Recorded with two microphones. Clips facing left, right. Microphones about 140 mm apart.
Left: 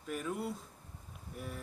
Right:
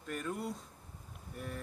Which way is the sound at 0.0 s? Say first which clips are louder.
Left 1 dB; 5° left (ahead or behind).